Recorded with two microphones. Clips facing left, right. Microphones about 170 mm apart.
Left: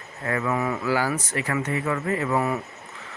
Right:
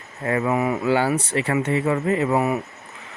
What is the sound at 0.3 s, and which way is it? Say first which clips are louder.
Speech: right 4 dB; 25° right (ahead or behind).